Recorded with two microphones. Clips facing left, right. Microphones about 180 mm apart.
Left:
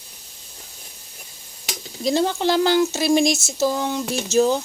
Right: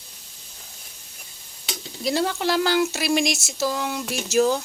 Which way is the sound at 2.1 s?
20° left (ahead or behind).